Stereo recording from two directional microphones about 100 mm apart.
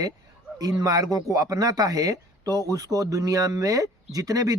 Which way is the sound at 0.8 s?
35° right (ahead or behind).